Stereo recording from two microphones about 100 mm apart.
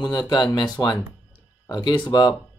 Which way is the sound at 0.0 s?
40° left (ahead or behind).